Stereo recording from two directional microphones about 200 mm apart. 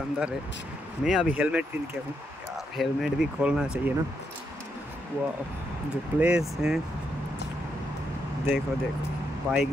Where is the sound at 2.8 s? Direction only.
Centre (ahead or behind).